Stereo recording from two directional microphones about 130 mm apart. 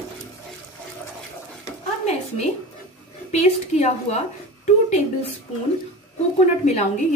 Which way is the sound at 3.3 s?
55° left (ahead or behind).